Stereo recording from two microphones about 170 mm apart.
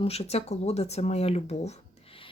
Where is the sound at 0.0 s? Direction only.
35° left (ahead or behind).